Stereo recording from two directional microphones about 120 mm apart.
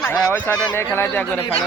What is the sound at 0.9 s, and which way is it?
Speech, 15° left (ahead or behind).